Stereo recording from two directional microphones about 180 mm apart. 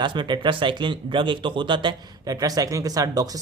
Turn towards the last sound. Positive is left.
turn(degrees=-20)  # may be behind; listen again after turning